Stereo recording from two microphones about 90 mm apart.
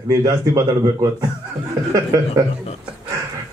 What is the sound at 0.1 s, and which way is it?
Speech, 40° right (ahead or behind).